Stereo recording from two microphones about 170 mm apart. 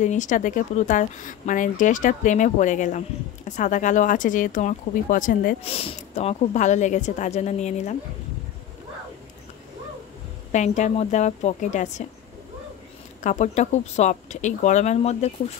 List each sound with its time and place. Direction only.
0.0 s speech: 45° left (ahead or behind)
5.6 s speech: 35° left (ahead or behind)
10.5 s speech: 45° left (ahead or behind)
13.2 s speech: 45° left (ahead or behind)